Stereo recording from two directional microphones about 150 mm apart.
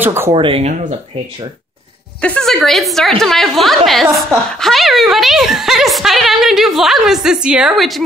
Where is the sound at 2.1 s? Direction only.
5° left (ahead or behind).